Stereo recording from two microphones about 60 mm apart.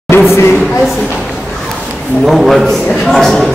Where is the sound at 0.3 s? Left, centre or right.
Left.